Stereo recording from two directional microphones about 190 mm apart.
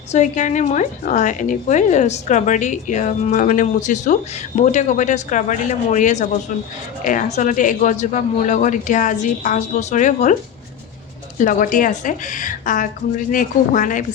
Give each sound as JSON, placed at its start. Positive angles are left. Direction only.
{"t": 0.1, "sound": "speech", "side_deg": 40}
{"t": 11.3, "sound": "a woman's voice", "side_deg": 45}